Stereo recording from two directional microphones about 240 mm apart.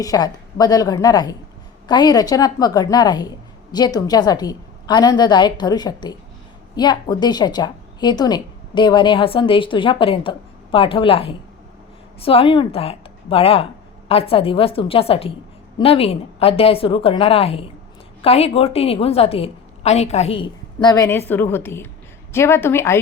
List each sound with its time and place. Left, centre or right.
0.0 s a woman's voice: centre